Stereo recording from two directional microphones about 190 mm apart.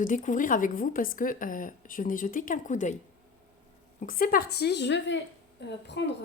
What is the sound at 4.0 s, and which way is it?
A woman's voice, 50° left (ahead or behind).